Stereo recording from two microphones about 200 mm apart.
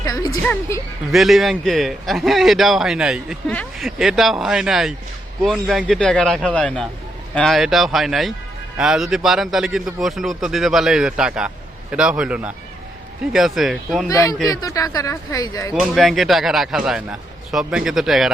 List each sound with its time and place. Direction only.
0.0 s music: 20° left (ahead or behind)
0.4 s a man's voice: 5° left (ahead or behind)
14.1 s speech: 15° left (ahead or behind)
15.7 s a man's voice: centre (ahead or behind)